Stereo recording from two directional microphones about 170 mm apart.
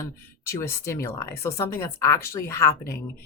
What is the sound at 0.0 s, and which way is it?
Speech, 15° left (ahead or behind).